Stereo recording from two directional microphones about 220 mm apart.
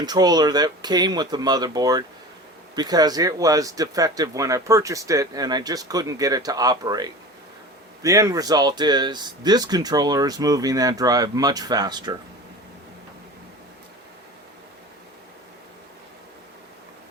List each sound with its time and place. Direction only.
0.0 s speech: 20° right (ahead or behind)